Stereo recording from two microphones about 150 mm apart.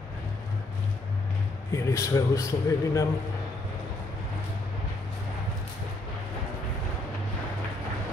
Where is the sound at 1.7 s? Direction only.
20° left (ahead or behind).